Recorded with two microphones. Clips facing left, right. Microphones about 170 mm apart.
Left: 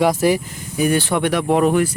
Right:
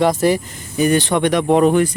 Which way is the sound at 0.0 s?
10° left (ahead or behind).